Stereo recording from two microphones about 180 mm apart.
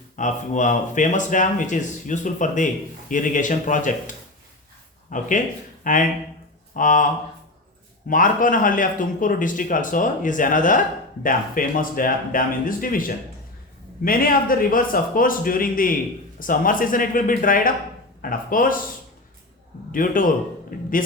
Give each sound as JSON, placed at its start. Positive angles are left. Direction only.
{"t": 0.2, "sound": "speech", "side_deg": 45}
{"t": 5.1, "sound": "speech", "side_deg": 45}
{"t": 19.9, "sound": "a man's voice", "side_deg": 50}